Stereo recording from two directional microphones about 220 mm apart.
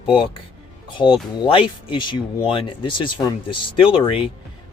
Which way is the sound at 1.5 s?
20° left (ahead or behind).